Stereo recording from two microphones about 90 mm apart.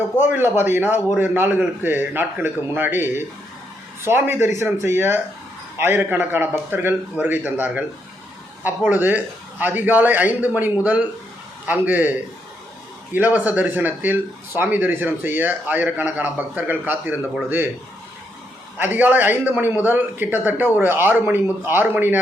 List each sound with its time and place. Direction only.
0.2 s a man's voice: 25° right (ahead or behind)
13.1 s speech: 20° right (ahead or behind)
18.8 s speech: 20° right (ahead or behind)